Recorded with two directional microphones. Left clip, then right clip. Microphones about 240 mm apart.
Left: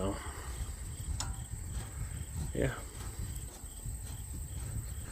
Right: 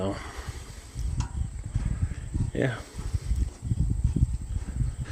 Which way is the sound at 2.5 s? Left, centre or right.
Right.